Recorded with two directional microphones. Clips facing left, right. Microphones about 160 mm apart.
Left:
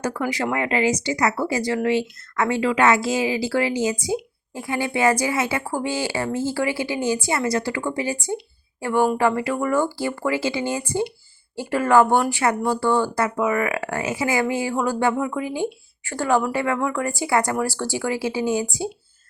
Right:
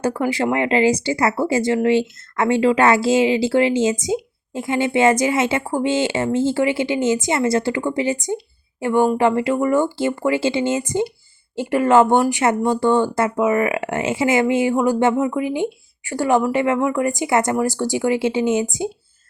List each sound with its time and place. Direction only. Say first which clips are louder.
0.0 s speech: right 4 dB; 30° right (ahead or behind)